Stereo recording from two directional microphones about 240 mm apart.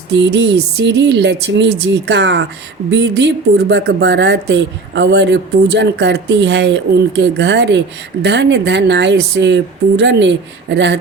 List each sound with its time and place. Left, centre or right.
0.1 s a woman's voice: right